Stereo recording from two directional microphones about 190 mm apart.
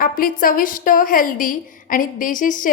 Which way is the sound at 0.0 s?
45° left (ahead or behind).